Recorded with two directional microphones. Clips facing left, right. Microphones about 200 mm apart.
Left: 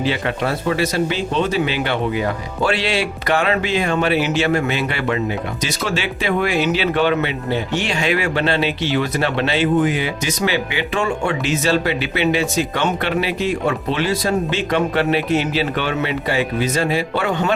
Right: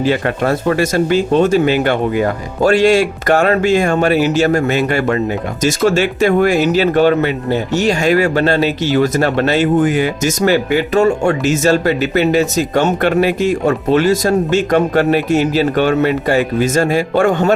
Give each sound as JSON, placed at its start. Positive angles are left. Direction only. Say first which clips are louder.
{"t": 0.0, "sound": "speech", "louder": "right 5 dB", "side_deg": -45}